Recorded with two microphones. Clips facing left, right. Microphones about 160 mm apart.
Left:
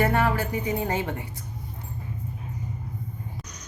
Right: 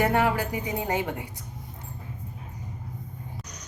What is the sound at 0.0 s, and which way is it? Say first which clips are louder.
Speech: even; 15° right (ahead or behind).